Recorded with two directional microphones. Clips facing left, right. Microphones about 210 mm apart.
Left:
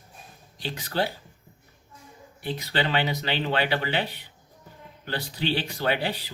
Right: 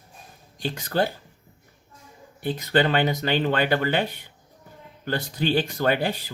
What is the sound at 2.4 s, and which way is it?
Speech, 50° right (ahead or behind).